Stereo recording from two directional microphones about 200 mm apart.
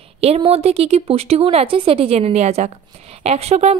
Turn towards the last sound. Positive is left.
turn(degrees=-30)  # may be behind; listen again after turning